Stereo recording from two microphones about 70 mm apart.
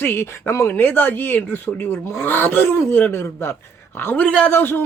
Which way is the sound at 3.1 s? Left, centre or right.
Left.